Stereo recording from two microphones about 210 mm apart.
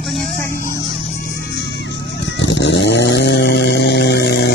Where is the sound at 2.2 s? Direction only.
60° left (ahead or behind).